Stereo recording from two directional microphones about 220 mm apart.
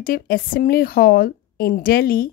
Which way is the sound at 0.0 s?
40° left (ahead or behind).